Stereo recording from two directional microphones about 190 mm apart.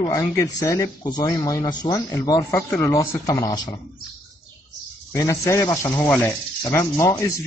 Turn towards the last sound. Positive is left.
turn(degrees=15)  # may be behind; listen again after turning